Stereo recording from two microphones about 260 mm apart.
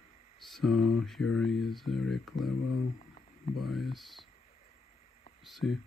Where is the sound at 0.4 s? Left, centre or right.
Centre.